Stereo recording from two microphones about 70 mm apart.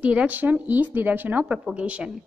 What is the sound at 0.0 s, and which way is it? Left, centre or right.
A woman's voice, centre.